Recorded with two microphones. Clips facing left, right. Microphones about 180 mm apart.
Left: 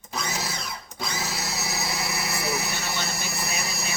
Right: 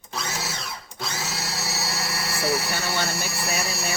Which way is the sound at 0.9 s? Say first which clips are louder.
Left 1 dB; 5° right (ahead or behind).